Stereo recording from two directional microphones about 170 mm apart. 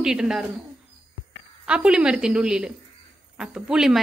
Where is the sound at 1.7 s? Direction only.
5° right (ahead or behind).